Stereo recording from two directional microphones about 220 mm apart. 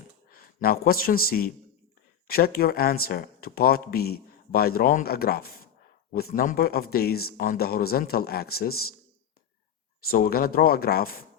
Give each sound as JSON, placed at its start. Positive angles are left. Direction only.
{"t": 0.3, "sound": "speech", "side_deg": 40}
{"t": 10.1, "sound": "speech", "side_deg": 45}